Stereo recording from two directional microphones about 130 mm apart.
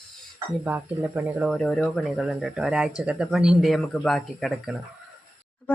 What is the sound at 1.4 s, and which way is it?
Speech, 5° left (ahead or behind).